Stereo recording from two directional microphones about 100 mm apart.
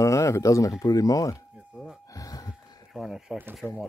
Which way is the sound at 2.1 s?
35° left (ahead or behind).